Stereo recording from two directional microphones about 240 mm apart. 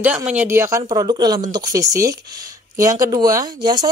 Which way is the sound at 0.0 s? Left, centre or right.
Centre.